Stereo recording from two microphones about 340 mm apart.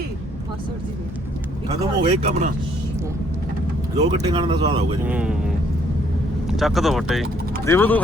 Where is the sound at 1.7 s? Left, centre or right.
Centre.